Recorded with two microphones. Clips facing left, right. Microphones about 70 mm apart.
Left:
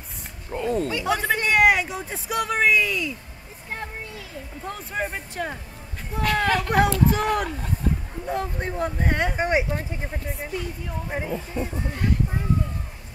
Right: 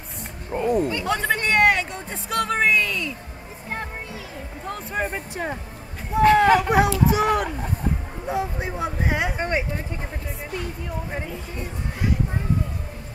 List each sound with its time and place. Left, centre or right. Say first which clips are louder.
0.5 s wild animals: right 3 dB; centre
0.8 s speech: even; centre
4.6 s speech: right 2 dB; centre
5.1 s speech: right 2 dB; centre
9.4 s speech: left 2 dB; centre
11.1 s speech: left 5 dB; centre